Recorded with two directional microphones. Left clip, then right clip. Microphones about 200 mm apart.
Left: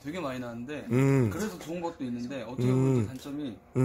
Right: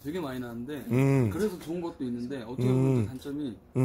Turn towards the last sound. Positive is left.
turn(degrees=15)  # may be behind; listen again after turning